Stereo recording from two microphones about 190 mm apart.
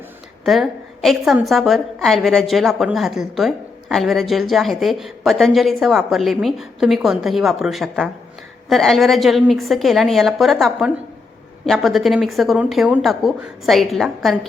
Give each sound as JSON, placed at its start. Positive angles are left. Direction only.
{"t": 0.4, "sound": "a woman's voice", "side_deg": 0}